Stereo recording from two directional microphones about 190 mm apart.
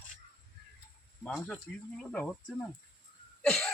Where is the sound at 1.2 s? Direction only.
5° left (ahead or behind).